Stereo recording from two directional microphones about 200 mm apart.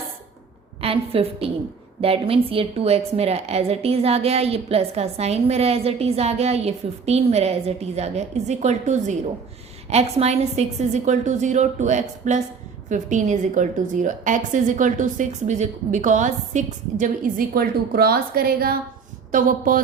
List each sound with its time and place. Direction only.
0.8 s a woman's voice: 30° right (ahead or behind)